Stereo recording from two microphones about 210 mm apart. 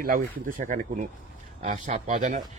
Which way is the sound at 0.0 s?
40° right (ahead or behind).